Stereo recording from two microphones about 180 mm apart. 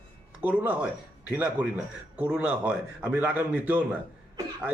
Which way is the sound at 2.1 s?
5° right (ahead or behind).